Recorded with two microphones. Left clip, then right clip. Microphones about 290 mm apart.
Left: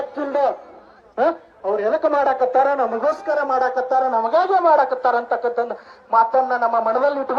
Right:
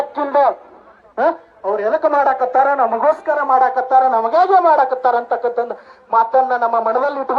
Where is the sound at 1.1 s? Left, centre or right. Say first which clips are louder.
Right 3 dB; centre.